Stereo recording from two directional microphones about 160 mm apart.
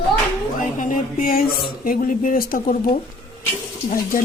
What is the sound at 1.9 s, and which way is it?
Speech, 60° left (ahead or behind).